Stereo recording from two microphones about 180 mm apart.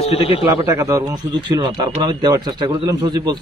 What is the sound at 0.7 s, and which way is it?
Speech, 15° right (ahead or behind).